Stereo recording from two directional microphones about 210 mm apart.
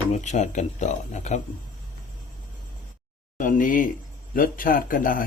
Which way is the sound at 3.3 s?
40° left (ahead or behind).